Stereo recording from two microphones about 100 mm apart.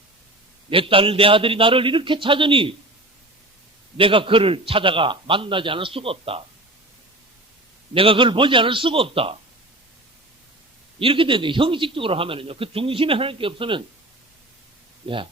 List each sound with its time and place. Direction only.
0.7 s speech: 65° right (ahead or behind)
3.9 s speech: 60° right (ahead or behind)
7.9 s speech: 60° right (ahead or behind)
11.0 s speech: 60° right (ahead or behind)
15.0 s speech: 60° right (ahead or behind)